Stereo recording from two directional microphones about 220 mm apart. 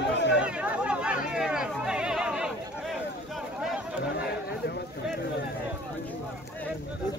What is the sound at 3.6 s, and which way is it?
Chatter, 5° right (ahead or behind).